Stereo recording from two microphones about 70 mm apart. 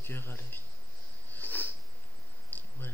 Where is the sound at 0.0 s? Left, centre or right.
Left.